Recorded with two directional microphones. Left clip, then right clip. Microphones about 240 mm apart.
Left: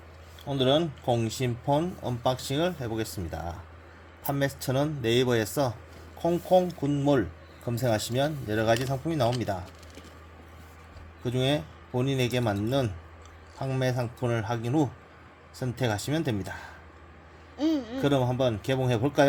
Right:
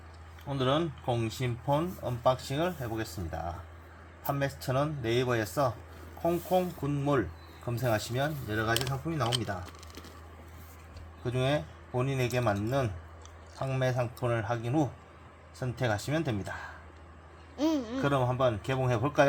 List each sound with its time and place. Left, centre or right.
0.4 s speech: left
11.2 s speech: left
17.6 s a sound: centre
18.0 s speech: left